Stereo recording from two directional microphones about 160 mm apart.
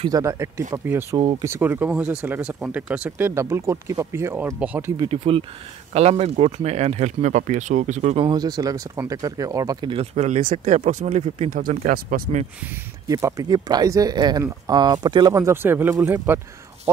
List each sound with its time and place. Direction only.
0.0 s speech: 20° right (ahead or behind)
1.1 s speech: 30° right (ahead or behind)
1.4 s speech: 15° right (ahead or behind)
4.9 s speech: 30° right (ahead or behind); by 8.2 s 50° right (ahead or behind)
8.2 s speech: 25° right (ahead or behind); by 11.6 s 40° right (ahead or behind)
11.6 s speech: 55° right (ahead or behind)
13.1 s speech: 25° right (ahead or behind)